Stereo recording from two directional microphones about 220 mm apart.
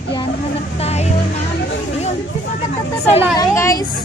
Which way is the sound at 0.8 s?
30° left (ahead or behind).